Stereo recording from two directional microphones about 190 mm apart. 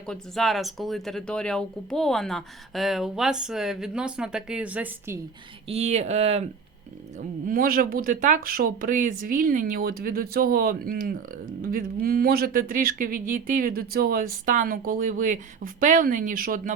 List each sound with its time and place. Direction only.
0.0 s speech: centre (ahead or behind)
5.6 s speech: 35° right (ahead or behind)
7.2 s speech: 45° right (ahead or behind)